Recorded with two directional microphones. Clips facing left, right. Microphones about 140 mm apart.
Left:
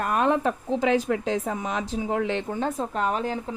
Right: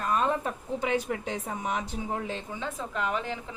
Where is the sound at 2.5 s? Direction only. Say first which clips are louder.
Left 7 dB; 45° left (ahead or behind).